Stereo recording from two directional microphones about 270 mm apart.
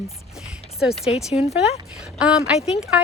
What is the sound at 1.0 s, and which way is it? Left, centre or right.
Speech, left.